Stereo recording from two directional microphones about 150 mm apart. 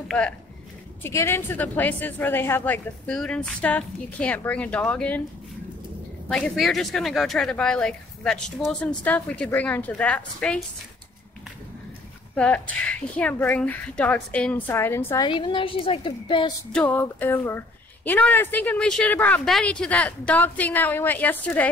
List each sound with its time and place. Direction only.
1.0 s a woman's voice: 15° left (ahead or behind)
6.2 s a woman's voice: 5° left (ahead or behind)
12.4 s a woman's voice: 10° left (ahead or behind)
15.2 s a woman's voice: 35° left (ahead or behind)
16.7 s a woman's voice: 10° left (ahead or behind)